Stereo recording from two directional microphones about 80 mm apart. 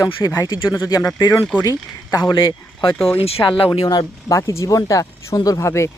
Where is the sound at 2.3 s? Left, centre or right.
Left.